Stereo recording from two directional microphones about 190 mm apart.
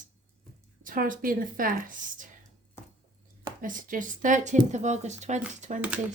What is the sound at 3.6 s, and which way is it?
Speech, 45° right (ahead or behind).